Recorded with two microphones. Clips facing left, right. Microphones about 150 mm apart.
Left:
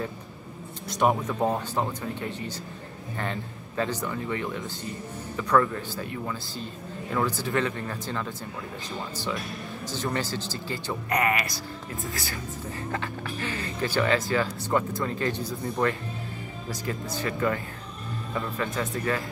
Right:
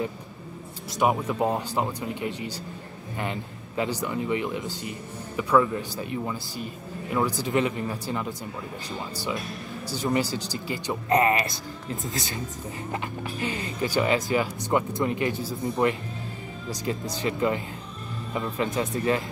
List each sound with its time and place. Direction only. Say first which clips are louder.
0.8 s a man's voice: even; 5° right (ahead or behind); by 19.2 s 20° right (ahead or behind)